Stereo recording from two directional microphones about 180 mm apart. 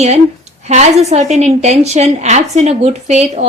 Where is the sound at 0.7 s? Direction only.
40° right (ahead or behind).